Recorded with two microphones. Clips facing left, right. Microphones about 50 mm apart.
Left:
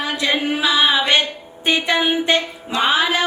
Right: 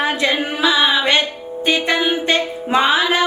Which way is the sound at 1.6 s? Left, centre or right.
Left.